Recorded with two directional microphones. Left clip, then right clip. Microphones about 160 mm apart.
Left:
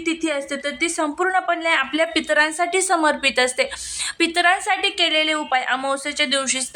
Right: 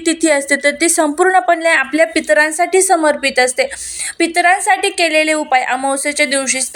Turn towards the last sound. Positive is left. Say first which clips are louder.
# right 5 dB
turn(degrees=-15)  # may be behind; listen again after turning